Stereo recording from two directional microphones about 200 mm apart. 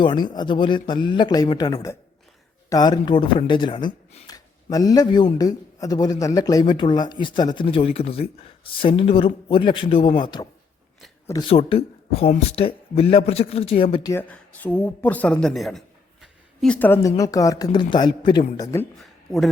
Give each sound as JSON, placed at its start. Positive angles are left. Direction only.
{"t": 0.0, "sound": "a man's voice", "side_deg": 25}
{"t": 14.1, "sound": "a woman's voice", "side_deg": 10}
{"t": 18.9, "sound": "a sound", "side_deg": 0}